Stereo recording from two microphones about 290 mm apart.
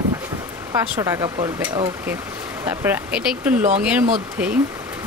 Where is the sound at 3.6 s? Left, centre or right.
Right.